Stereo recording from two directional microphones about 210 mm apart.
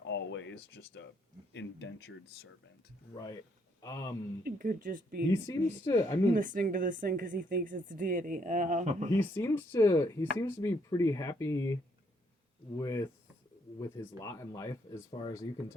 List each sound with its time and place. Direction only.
0.1 s speech: 60° left (ahead or behind)
3.2 s speech: 15° left (ahead or behind)
4.4 s speech: 40° right (ahead or behind)
5.3 s speech: 10° left (ahead or behind)
6.3 s speech: 40° right (ahead or behind)
9.1 s speech: 10° left (ahead or behind)
12.8 s speech: 15° left (ahead or behind)